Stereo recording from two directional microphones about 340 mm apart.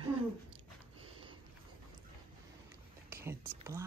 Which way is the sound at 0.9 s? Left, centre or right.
Centre.